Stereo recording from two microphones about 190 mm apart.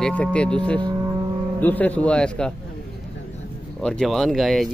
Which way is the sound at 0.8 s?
20° right (ahead or behind).